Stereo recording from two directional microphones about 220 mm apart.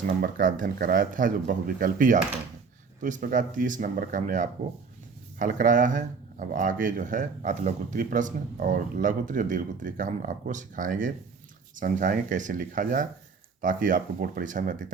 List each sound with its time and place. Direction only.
0.2 s speech: 40° right (ahead or behind)